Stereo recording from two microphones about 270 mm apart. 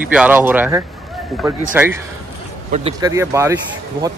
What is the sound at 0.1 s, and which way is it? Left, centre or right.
Speech, centre.